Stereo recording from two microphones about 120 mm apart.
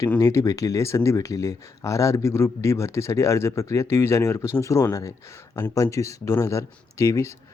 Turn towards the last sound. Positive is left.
turn(degrees=25)  # may be behind; listen again after turning